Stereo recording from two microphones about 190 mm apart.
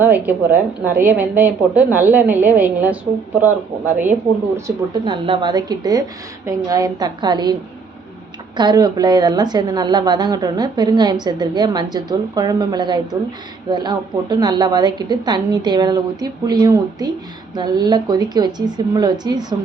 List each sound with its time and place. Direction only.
0.0 s a woman's voice: 10° right (ahead or behind)
4.0 s a woman's voice: 10° right (ahead or behind)
5.0 s a woman's voice: 25° right (ahead or behind)
8.5 s a woman's voice: 20° right (ahead or behind)